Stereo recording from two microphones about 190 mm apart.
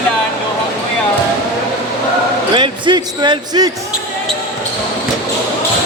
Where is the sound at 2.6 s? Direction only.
25° right (ahead or behind).